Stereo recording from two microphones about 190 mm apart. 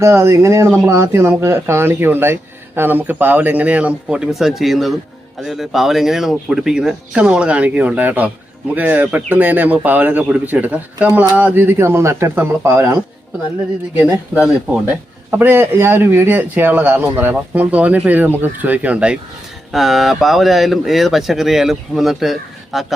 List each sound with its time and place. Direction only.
0.0 s speech: 15° right (ahead or behind)